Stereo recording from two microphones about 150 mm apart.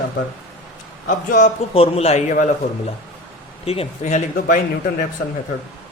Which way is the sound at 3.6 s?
40° left (ahead or behind).